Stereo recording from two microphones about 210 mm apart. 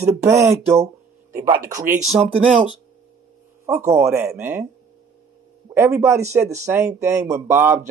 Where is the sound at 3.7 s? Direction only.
10° right (ahead or behind).